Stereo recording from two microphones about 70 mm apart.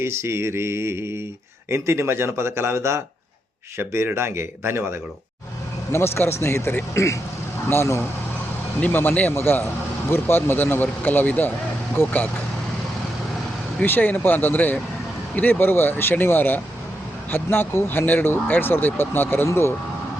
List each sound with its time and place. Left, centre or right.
0.0 s speech: right
5.9 s speech: left
6.9 s speech: left
8.8 s a man's voice: left
13.8 s a man's voice: left